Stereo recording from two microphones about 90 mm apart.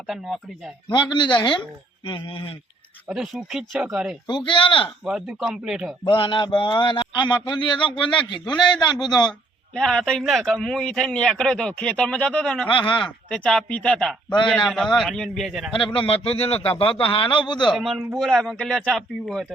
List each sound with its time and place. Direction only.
0.9 s a man's voice: 55° left (ahead or behind)
3.1 s speech: 5° right (ahead or behind)
4.3 s a man's voice: 60° left (ahead or behind)
5.0 s speech: 5° right (ahead or behind)
6.1 s a man's voice: 70° left (ahead or behind)
8.6 s a man's voice: 55° left (ahead or behind)
9.7 s a man's voice: 5° left (ahead or behind)
12.6 s a man's voice: 65° left (ahead or behind)
13.1 s a man's voice: 10° left (ahead or behind)
16.0 s a man's voice: 90° left; by 17.7 s 60° left (ahead or behind)
17.7 s speech: 5° right (ahead or behind)